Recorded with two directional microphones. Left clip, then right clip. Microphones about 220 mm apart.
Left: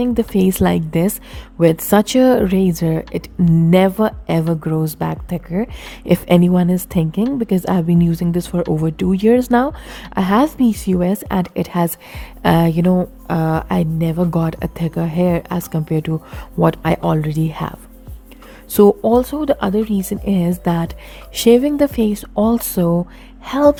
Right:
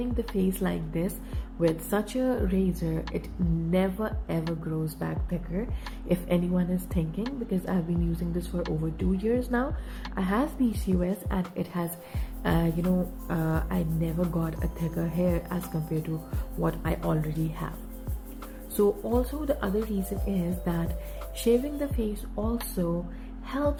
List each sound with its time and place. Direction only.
0.0 s speech: 55° left (ahead or behind)
18.8 s speech: 55° left (ahead or behind)